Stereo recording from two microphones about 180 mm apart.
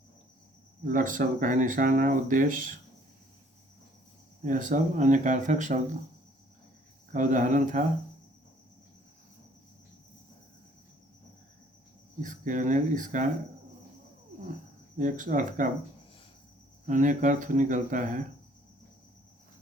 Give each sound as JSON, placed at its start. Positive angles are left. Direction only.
{"t": 0.9, "sound": "speech", "side_deg": -50}
{"t": 4.4, "sound": "speech", "side_deg": -45}
{"t": 7.1, "sound": "speech", "side_deg": -45}
{"t": 12.2, "sound": "speech", "side_deg": -45}
{"t": 14.9, "sound": "speech", "side_deg": -45}
{"t": 16.8, "sound": "speech", "side_deg": -45}